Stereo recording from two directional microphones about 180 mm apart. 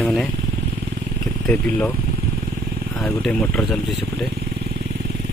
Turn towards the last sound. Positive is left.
turn(degrees=0)  # may be behind; listen again after turning